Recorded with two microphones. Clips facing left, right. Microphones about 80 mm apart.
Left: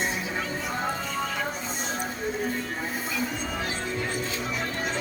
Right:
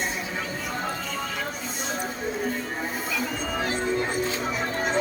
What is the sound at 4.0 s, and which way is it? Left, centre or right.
Music, right.